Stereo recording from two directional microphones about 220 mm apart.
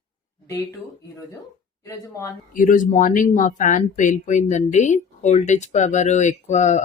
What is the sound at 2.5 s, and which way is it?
Speech, 35° left (ahead or behind).